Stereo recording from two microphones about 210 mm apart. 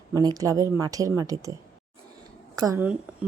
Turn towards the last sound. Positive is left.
turn(degrees=-5)  # may be behind; listen again after turning